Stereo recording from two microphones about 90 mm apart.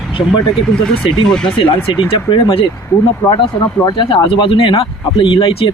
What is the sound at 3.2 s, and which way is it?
Speech, 40° left (ahead or behind).